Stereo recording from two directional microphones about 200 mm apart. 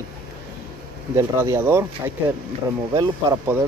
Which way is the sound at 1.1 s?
15° right (ahead or behind).